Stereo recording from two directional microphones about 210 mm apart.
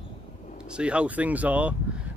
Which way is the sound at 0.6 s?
5° right (ahead or behind).